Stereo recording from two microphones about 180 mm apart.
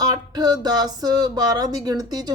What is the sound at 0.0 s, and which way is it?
Speech, 20° right (ahead or behind).